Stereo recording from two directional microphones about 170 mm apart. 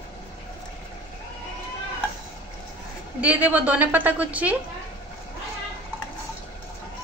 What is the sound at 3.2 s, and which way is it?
A woman's voice, 10° right (ahead or behind).